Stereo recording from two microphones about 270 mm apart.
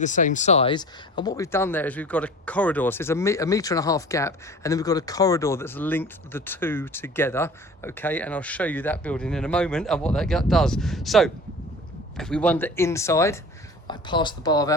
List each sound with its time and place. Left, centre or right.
0.0 s speech: left